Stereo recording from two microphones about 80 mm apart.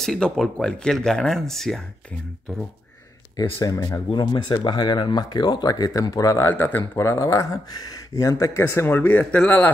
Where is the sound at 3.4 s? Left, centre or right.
Left.